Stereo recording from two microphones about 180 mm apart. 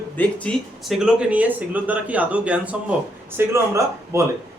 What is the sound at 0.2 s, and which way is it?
Speech, 5° left (ahead or behind).